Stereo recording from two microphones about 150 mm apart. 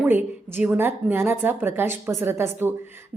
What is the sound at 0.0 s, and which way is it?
A woman's voice, 15° right (ahead or behind).